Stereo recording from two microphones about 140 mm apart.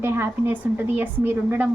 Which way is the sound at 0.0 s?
15° right (ahead or behind).